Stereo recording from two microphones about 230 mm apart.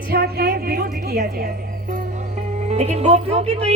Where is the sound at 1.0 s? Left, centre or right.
Right.